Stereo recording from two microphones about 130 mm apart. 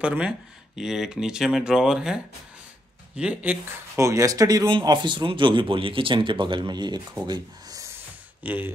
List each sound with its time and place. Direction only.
0.0 s speech: 10° right (ahead or behind)
3.9 s speech: 25° right (ahead or behind)
8.5 s speech: 15° right (ahead or behind)